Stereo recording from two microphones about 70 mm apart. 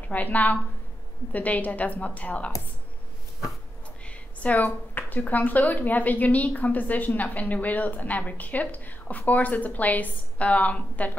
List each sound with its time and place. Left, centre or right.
0.1 s speech: left
4.0 s speech: centre